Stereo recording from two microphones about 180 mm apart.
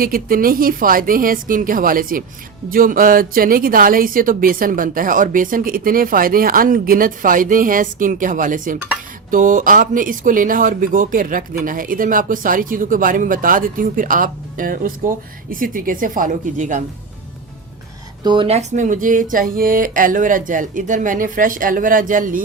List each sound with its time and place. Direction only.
0.0 s speech: 55° right (ahead or behind)
18.2 s speech: 25° right (ahead or behind); by 22.4 s 50° right (ahead or behind)